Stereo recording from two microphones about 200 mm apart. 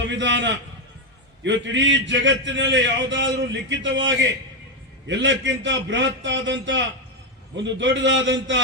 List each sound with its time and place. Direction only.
0.1 s a man's voice: 65° right (ahead or behind)